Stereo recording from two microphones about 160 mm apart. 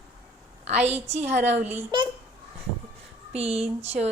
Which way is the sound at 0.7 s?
40° right (ahead or behind).